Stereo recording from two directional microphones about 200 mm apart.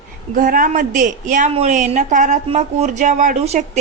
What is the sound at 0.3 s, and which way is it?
A woman's voice, 45° right (ahead or behind).